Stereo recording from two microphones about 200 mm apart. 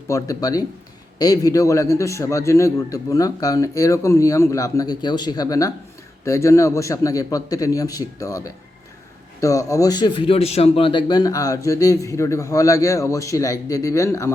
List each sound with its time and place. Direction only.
0.1 s a man's voice: 15° left (ahead or behind)